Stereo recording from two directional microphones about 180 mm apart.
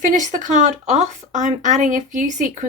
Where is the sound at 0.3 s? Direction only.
45° right (ahead or behind).